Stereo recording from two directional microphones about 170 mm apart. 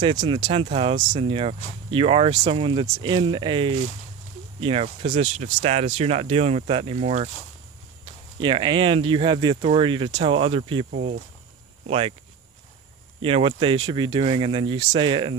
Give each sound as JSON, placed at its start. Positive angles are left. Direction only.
{"t": 0.0, "sound": "speech", "side_deg": -25}
{"t": 8.4, "sound": "speech", "side_deg": -30}
{"t": 10.9, "sound": "speech", "side_deg": -60}
{"t": 13.2, "sound": "speech", "side_deg": -30}